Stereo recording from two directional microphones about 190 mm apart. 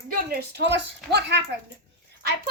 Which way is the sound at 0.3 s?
55° right (ahead or behind).